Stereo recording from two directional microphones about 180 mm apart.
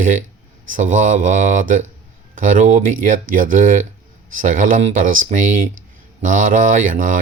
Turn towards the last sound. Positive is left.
turn(degrees=-45)  # may be behind; listen again after turning